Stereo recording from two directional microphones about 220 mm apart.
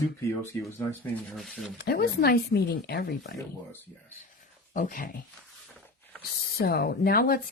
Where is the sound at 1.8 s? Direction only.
45° left (ahead or behind).